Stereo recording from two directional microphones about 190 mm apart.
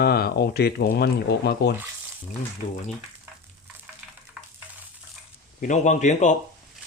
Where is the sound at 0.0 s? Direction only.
55° left (ahead or behind).